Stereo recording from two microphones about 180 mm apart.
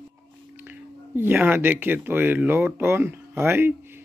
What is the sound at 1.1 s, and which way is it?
Speech, 10° right (ahead or behind).